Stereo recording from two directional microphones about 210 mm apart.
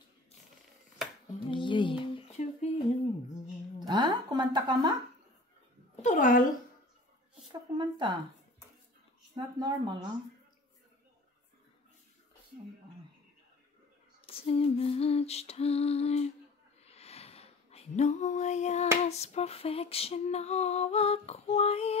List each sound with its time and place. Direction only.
1.5 s a sound: 25° left (ahead or behind)
3.8 s a woman's voice: 20° right (ahead or behind)
6.0 s speech: 40° left (ahead or behind)
7.7 s speech: 20° right (ahead or behind)
9.3 s speech: 20° right (ahead or behind)
14.2 s female singing: 30° left (ahead or behind)
16.8 s a sound: 30° left (ahead or behind)
19.0 s female singing: 30° left (ahead or behind)